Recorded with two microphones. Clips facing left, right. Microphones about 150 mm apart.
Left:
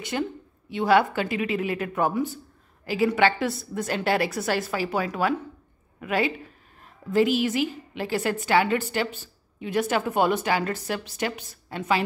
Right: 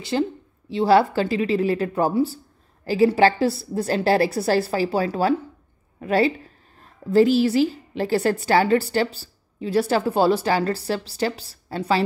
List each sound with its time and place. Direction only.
0.1 s a woman's voice: 30° right (ahead or behind)